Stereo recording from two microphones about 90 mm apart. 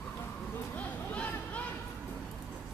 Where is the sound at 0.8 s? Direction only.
15° left (ahead or behind).